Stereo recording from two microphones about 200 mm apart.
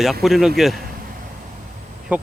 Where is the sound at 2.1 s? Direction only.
5° right (ahead or behind).